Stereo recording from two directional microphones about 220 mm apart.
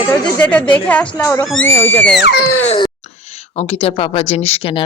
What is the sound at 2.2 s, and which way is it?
Speech, 45° left (ahead or behind).